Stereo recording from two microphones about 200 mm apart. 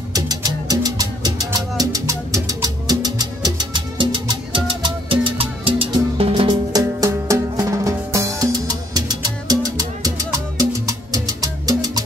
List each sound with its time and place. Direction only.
0.1 s music: 20° right (ahead or behind)